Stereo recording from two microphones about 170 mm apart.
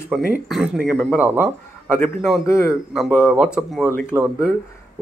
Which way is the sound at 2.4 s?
15° left (ahead or behind).